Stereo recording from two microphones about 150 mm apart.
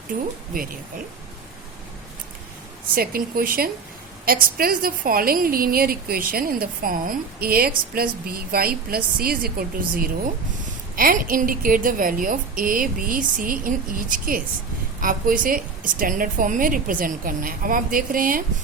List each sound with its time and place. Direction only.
0.1 s a woman's voice: 70° right (ahead or behind)
2.9 s a woman's voice: 75° right (ahead or behind)
10.9 s a woman's voice: 70° right (ahead or behind)